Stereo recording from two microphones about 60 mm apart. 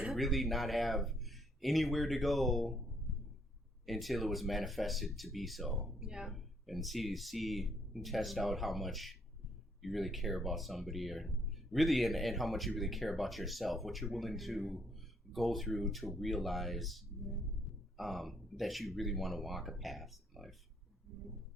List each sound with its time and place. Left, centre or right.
0.0 s speech: centre
3.8 s speech: centre